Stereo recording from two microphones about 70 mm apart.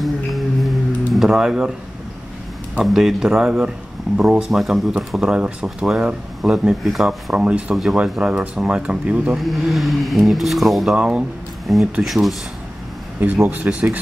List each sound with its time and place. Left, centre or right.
0.0 s music: centre
2.8 s speech: centre
7.3 s speech: centre
7.7 s speech: centre
9.4 s speech: centre
11.0 s speech: centre
11.6 s speech: centre
13.7 s speech: centre